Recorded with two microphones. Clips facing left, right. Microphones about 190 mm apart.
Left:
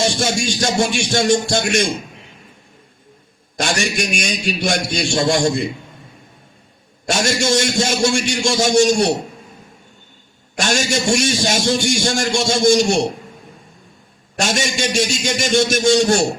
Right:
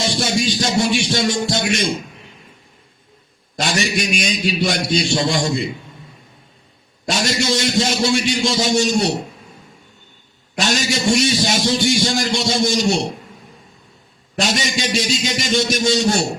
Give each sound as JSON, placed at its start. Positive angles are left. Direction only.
{"t": 0.0, "sound": "a man's voice", "side_deg": 50}
{"t": 3.6, "sound": "a man's voice", "side_deg": 50}
{"t": 7.1, "sound": "a man's voice", "side_deg": 50}
{"t": 10.6, "sound": "a man's voice", "side_deg": 50}
{"t": 14.3, "sound": "a man's voice", "side_deg": 50}